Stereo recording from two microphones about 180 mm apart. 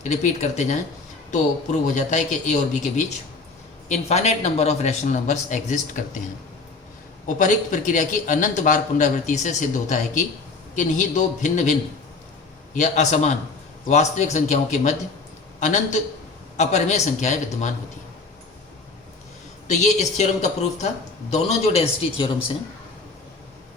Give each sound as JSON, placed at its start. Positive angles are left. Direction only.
{"t": 0.0, "sound": "a man's voice", "side_deg": 40}
{"t": 1.9, "sound": "a man's voice", "side_deg": 45}
{"t": 7.3, "sound": "a man's voice", "side_deg": 45}
{"t": 19.8, "sound": "a man's voice", "side_deg": 40}